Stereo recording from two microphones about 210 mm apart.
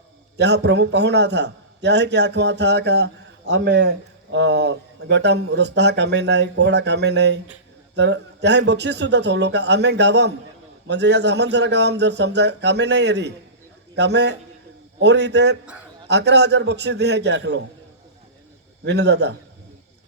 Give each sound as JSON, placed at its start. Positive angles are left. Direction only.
{"t": 0.3, "sound": "a man's voice", "side_deg": -55}
{"t": 18.9, "sound": "a man's voice", "side_deg": -55}